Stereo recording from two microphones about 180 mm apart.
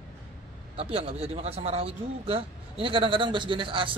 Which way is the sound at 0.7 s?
30° right (ahead or behind).